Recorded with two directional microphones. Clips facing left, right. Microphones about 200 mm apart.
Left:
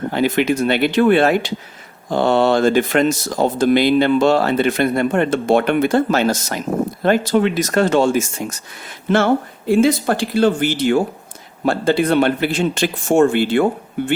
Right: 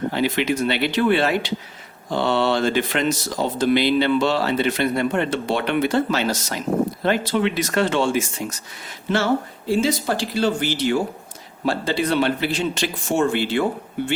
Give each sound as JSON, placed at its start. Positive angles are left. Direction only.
{"t": 0.1, "sound": "speech", "side_deg": 50}